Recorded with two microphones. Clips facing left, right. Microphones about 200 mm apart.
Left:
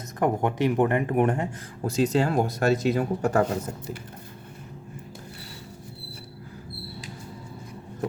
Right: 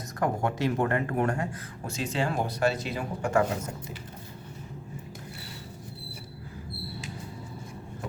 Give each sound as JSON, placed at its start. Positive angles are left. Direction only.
{"t": 0.2, "sound": "speech", "side_deg": 20}
{"t": 1.8, "sound": "speech", "side_deg": 40}